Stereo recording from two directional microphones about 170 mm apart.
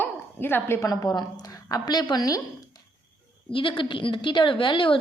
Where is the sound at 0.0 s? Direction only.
10° left (ahead or behind).